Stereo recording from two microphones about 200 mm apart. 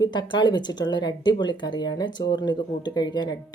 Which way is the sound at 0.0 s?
20° left (ahead or behind).